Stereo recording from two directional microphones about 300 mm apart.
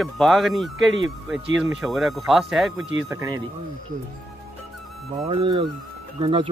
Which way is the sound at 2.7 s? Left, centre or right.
Right.